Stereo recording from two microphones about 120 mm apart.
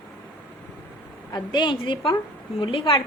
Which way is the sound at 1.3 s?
40° left (ahead or behind).